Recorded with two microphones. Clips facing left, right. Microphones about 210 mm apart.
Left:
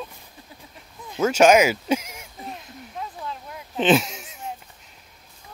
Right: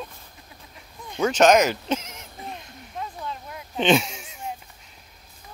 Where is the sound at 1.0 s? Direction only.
5° left (ahead or behind).